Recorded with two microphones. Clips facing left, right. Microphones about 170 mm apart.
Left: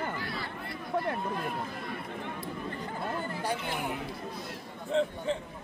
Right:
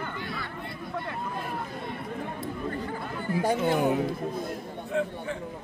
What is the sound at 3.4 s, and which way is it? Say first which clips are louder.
Speech: right 12 dB; 50° right (ahead or behind).